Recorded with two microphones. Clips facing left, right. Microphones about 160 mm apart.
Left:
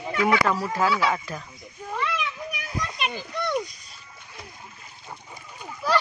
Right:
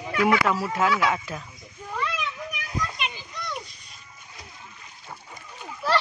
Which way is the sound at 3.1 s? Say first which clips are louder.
Left 8 dB; 55° left (ahead or behind).